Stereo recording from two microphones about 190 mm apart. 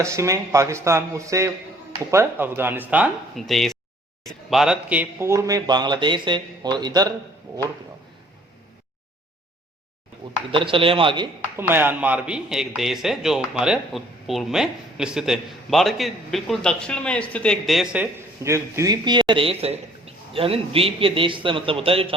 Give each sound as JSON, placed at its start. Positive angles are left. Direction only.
{"t": 0.0, "sound": "speech", "side_deg": -15}
{"t": 10.5, "sound": "speech", "side_deg": -25}
{"t": 11.5, "sound": "speech", "side_deg": -10}